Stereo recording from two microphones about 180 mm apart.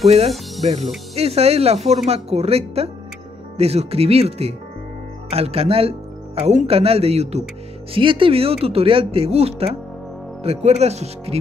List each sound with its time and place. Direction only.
0.6 s speech: 35° right (ahead or behind)